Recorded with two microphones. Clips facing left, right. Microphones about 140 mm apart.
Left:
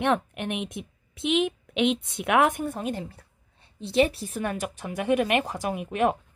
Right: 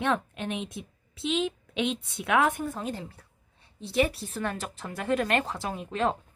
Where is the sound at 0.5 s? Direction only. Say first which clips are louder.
Left 3 dB; 15° left (ahead or behind).